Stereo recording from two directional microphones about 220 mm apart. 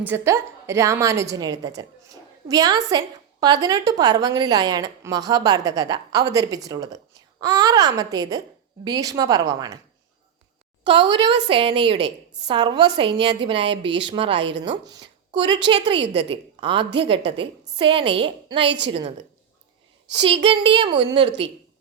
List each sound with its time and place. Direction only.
0.0 s a woman's voice: 10° right (ahead or behind)
10.8 s a woman's voice: 20° right (ahead or behind)
20.1 s a woman's voice: 25° right (ahead or behind)